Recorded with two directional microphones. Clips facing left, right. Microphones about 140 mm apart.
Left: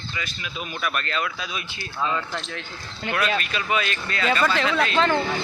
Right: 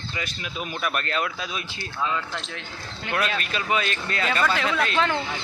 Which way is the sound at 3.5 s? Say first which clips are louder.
Even; 35° right (ahead or behind).